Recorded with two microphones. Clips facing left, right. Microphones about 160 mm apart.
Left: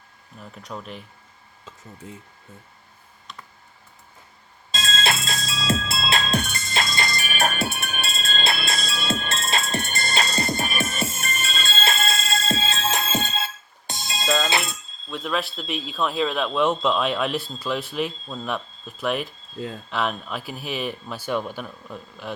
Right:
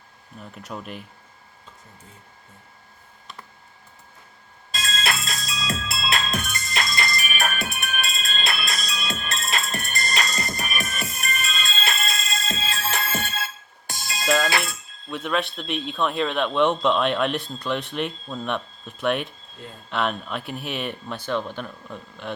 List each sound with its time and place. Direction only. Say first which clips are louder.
0.3 s speech: right 1 dB; 5° right (ahead or behind)
4.7 s music: left 2 dB; 25° left (ahead or behind)
15.1 s speech: right 1 dB; centre (ahead or behind)